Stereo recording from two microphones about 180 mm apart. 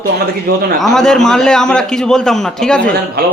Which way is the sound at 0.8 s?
Centre (ahead or behind).